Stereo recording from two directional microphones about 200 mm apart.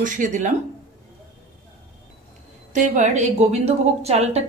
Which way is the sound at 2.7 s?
40° right (ahead or behind).